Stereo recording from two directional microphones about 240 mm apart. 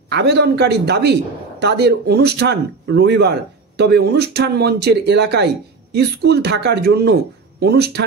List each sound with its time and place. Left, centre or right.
0.1 s a man's voice: right